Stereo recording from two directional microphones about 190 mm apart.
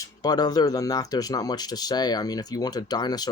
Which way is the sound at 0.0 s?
20° left (ahead or behind).